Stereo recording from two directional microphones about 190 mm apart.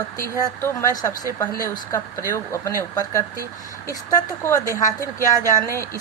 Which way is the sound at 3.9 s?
15° left (ahead or behind).